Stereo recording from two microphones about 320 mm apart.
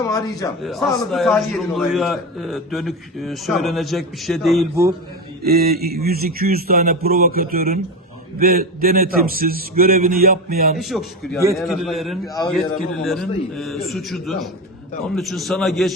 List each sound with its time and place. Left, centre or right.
0.0 s a man's voice: centre
0.6 s a man's voice: centre
5.4 s a man's voice: right
10.8 s a man's voice: centre